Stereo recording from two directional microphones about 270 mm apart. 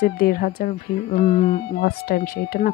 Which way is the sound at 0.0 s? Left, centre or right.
Left.